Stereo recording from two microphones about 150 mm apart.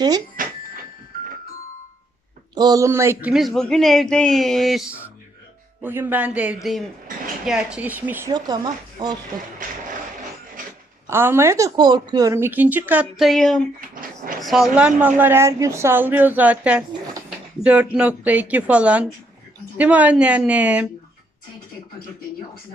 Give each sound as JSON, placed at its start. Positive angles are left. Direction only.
{"t": 0.4, "sound": "bicycle bell", "side_deg": -65}
{"t": 2.6, "sound": "a man's voice", "side_deg": -25}
{"t": 5.8, "sound": "speech", "side_deg": -15}
{"t": 8.3, "sound": "speech", "side_deg": -25}
{"t": 9.6, "sound": "a sound", "side_deg": -60}
{"t": 11.0, "sound": "speech", "side_deg": -15}